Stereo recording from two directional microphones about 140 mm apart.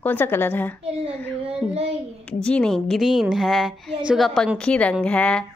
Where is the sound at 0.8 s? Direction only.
45° right (ahead or behind).